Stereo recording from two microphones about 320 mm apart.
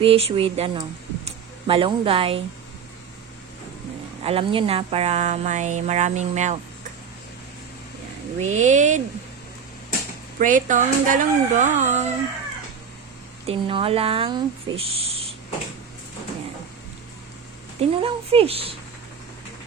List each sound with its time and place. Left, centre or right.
0.0 s speech: centre
4.2 s speech: centre
8.4 s speech: right
10.4 s speech: right
13.4 s speech: centre
17.7 s speech: centre